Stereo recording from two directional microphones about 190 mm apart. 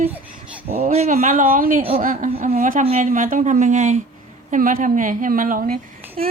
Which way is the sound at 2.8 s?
40° right (ahead or behind).